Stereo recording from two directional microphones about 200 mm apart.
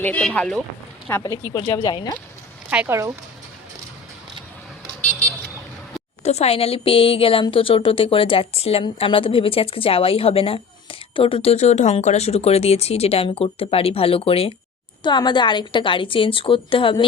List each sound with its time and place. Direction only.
0.0 s speech: 5° left (ahead or behind)
1.0 s a woman's voice: 15° left (ahead or behind)
2.6 s speech: 10° right (ahead or behind)
4.9 s vehicle: 40° left (ahead or behind)
6.2 s a woman's voice: 30° left (ahead or behind)